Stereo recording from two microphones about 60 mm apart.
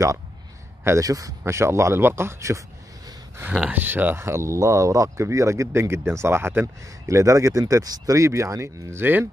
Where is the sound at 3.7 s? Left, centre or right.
Right.